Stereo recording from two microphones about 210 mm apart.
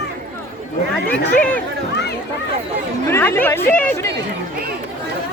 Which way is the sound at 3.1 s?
10° left (ahead or behind).